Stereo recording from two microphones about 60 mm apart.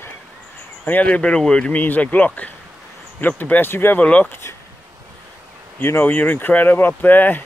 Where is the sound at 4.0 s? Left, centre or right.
Left.